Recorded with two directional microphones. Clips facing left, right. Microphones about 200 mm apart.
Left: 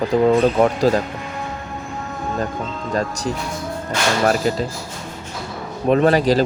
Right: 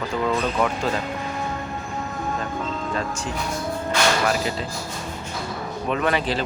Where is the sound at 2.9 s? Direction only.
40° left (ahead or behind).